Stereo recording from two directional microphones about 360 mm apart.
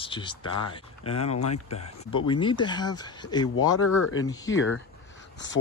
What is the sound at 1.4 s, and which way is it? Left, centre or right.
Speech, left.